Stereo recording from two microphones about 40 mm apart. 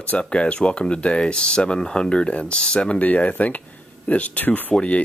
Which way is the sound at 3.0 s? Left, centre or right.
Left.